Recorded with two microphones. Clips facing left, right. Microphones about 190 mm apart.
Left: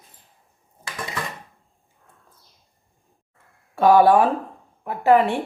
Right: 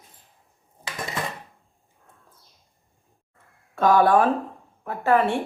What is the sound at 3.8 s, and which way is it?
A woman's voice, 15° left (ahead or behind).